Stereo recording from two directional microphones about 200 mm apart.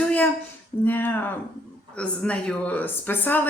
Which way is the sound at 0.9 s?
10° left (ahead or behind).